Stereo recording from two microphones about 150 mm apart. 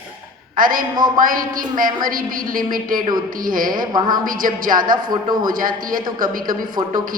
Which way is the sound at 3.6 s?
25° right (ahead or behind).